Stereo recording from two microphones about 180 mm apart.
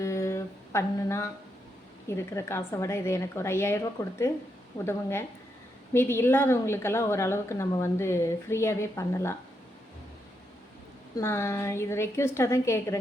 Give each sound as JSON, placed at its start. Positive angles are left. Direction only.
{"t": 0.0, "sound": "humming", "side_deg": 15}
{"t": 2.0, "sound": "a woman's voice", "side_deg": 15}
{"t": 11.2, "sound": "a woman's voice", "side_deg": 15}